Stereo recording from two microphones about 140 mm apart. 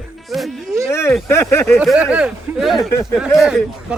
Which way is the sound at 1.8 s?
5° right (ahead or behind).